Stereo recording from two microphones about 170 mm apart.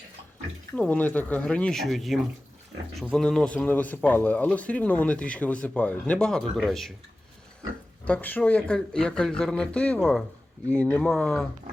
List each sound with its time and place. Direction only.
0.8 s a man's voice: 10° left (ahead or behind)
8.0 s a man's voice: 10° left (ahead or behind)